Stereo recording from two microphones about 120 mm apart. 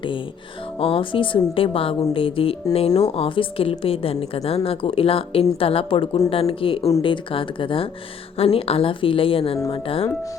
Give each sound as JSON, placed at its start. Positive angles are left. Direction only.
{"t": 0.8, "sound": "a woman's voice", "side_deg": 50}